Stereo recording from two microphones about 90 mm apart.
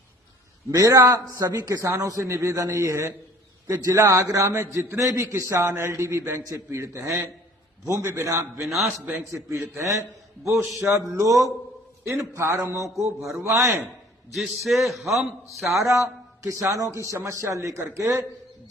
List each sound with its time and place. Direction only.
0.7 s a man's voice: 40° right (ahead or behind)
8.6 s a man's voice: centre (ahead or behind)
9.0 s a man's voice: 30° right (ahead or behind)
10.5 s a man's voice: 5° right (ahead or behind)
10.8 s a man's voice: 35° right (ahead or behind)
14.3 s a man's voice: centre (ahead or behind)
15.8 s a man's voice: 35° right (ahead or behind)